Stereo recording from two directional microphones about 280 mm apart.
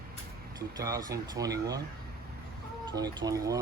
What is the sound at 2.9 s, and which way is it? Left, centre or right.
Speech, centre.